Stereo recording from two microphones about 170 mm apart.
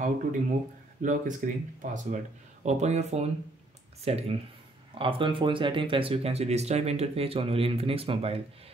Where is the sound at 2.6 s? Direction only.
40° right (ahead or behind).